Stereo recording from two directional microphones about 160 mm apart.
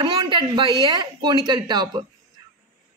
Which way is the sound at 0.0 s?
30° right (ahead or behind).